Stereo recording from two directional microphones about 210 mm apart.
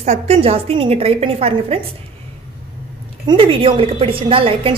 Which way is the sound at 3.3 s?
25° right (ahead or behind).